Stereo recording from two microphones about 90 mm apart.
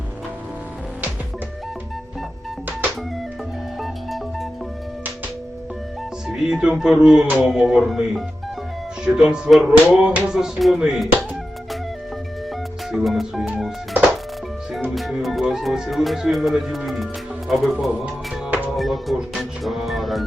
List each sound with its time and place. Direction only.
3.8 s music: centre (ahead or behind)
6.2 s music: 5° right (ahead or behind)
12.9 s speech: centre (ahead or behind)
14.8 s speech: centre (ahead or behind)
18.0 s music: 15° right (ahead or behind)
18.8 s music: centre (ahead or behind)